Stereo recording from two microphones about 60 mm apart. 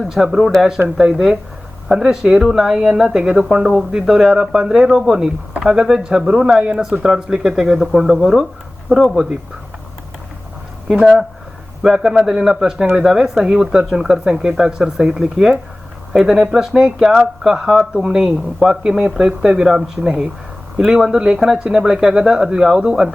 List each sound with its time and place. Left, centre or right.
0.0 s speech: centre
10.9 s speech: centre